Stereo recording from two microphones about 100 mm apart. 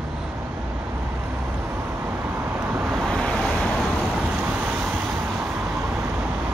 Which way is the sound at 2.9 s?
Centre (ahead or behind).